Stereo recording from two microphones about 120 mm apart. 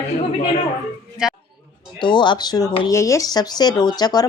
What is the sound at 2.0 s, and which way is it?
A woman's voice, 40° left (ahead or behind).